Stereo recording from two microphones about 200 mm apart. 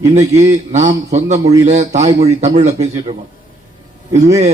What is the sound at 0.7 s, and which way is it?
A man's voice, 35° right (ahead or behind).